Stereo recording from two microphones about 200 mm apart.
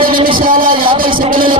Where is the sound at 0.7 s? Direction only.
25° right (ahead or behind).